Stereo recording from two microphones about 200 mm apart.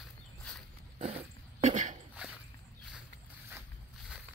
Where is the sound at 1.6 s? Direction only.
35° right (ahead or behind).